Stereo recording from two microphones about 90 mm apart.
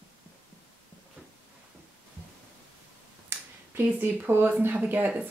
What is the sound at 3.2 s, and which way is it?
A woman's voice, 20° right (ahead or behind).